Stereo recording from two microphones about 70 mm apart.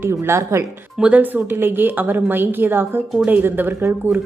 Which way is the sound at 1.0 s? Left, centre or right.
Right.